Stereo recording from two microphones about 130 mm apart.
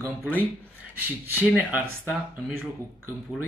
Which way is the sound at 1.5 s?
10° right (ahead or behind).